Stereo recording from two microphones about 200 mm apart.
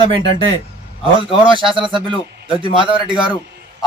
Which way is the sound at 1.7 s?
25° right (ahead or behind).